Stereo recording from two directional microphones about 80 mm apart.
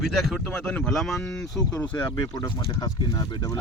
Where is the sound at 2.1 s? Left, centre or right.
Left.